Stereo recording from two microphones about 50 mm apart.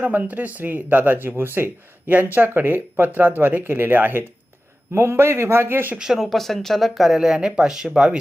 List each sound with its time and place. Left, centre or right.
0.0 s speech: right
1.4 s speech: right
2.1 s speech: right
4.9 s speech: right
6.0 s speech: centre
6.3 s speech: centre